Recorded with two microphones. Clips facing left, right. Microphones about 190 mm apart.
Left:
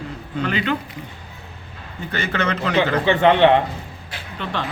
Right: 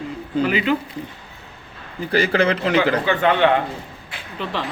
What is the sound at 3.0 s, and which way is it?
Music, 25° left (ahead or behind).